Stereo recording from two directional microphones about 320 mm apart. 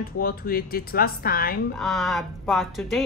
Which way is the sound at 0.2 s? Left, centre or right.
Left.